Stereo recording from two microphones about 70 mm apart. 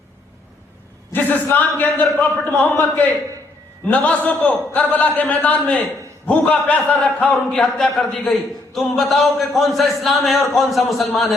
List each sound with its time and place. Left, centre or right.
1.1 s a man's voice: left; by 11.3 s centre